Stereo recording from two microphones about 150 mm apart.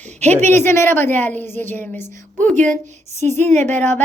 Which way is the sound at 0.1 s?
50° right (ahead or behind).